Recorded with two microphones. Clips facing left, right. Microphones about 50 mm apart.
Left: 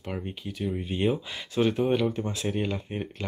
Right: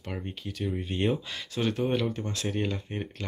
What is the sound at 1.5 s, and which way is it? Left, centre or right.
Speech, left.